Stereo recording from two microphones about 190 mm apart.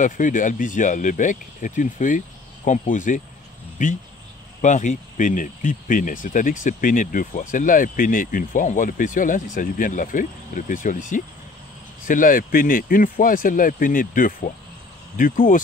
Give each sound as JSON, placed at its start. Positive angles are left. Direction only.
{"t": 0.0, "sound": "speech", "side_deg": 45}